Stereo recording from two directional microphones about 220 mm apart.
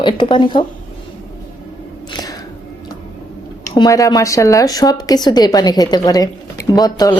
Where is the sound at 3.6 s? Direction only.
15° left (ahead or behind).